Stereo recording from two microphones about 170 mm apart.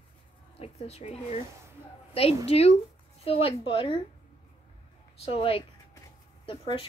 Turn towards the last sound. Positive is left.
turn(degrees=30)  # may be behind; listen again after turning